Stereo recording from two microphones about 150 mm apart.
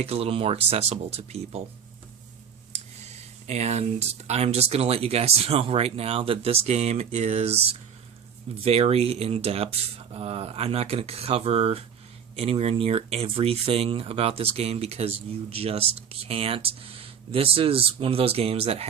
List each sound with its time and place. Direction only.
0.0 s speech: 45° right (ahead or behind)
2.7 s speech: 45° right (ahead or behind)